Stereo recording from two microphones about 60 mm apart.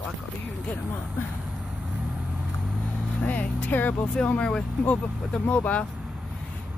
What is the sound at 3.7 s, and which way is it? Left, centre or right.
Speech, left.